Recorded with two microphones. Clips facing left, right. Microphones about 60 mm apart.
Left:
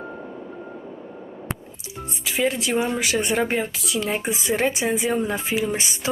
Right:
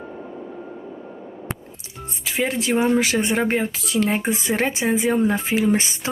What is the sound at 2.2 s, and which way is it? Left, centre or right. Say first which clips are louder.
Speech: even; right.